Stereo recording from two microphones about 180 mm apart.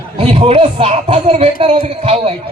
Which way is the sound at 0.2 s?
30° right (ahead or behind).